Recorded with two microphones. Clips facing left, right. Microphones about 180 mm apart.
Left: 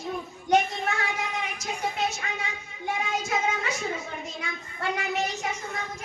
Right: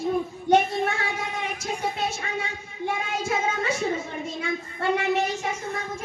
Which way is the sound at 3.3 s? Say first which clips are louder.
Right 6 dB; 30° right (ahead or behind).